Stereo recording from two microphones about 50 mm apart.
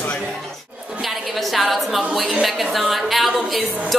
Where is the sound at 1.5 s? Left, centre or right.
Centre.